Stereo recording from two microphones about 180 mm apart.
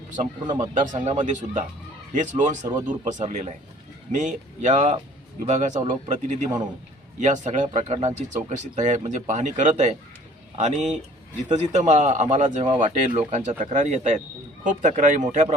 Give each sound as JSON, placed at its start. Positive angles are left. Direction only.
{"t": 0.4, "sound": "speech", "side_deg": -25}
{"t": 0.7, "sound": "speech", "side_deg": -45}